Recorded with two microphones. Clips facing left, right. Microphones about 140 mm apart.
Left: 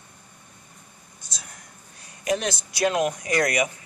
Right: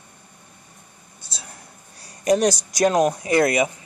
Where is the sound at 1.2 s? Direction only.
30° right (ahead or behind).